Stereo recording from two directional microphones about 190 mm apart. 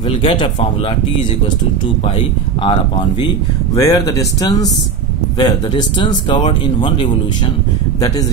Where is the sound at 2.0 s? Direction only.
30° left (ahead or behind).